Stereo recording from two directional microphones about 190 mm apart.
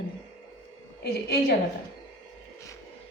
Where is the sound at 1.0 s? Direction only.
60° left (ahead or behind).